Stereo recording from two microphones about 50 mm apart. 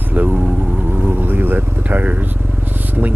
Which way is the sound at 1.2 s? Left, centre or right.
Right.